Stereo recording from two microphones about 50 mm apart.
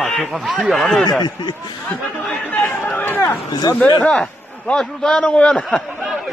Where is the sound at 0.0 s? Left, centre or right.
Centre.